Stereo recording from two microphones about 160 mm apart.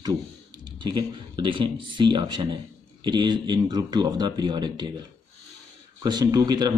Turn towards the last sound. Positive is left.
turn(degrees=-25)  # may be behind; listen again after turning